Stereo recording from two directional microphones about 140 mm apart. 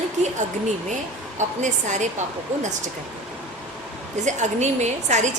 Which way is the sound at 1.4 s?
60° right (ahead or behind).